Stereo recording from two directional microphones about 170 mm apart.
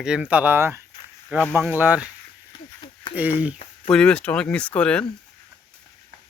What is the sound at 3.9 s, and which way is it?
Speech, 5° left (ahead or behind).